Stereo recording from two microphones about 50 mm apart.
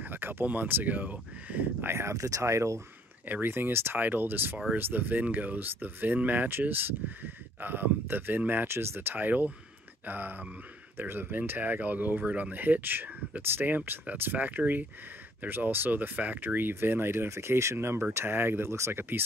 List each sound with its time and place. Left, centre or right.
0.0 s a sound: right
0.5 s speech: right
1.8 s speech: right
3.4 s speech: right
9.2 s speech: right
17.3 s speech: right